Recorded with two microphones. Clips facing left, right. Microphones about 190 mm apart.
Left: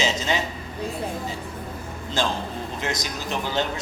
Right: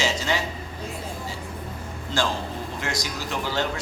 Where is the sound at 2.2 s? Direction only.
20° left (ahead or behind).